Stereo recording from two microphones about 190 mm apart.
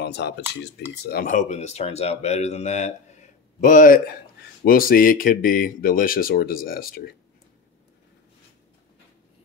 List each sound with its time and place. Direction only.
0.0 s speech: 60° left (ahead or behind)
1.0 s speech: 50° left (ahead or behind)